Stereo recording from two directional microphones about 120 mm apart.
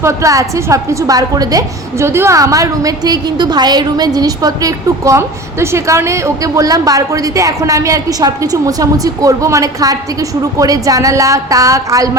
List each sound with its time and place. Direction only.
0.0 s a woman's voice: 25° right (ahead or behind)